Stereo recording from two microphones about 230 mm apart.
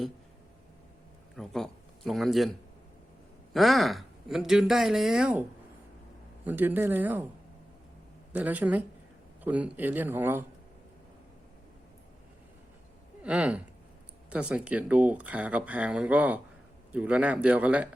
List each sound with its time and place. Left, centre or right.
1.4 s speech: centre
8.3 s speech: centre
13.2 s speech: centre